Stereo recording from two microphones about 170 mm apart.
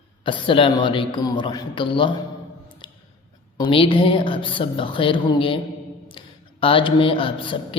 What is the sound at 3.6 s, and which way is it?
A woman's voice, 30° left (ahead or behind).